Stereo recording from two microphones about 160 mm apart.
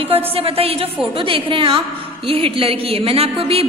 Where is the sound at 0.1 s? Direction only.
35° right (ahead or behind).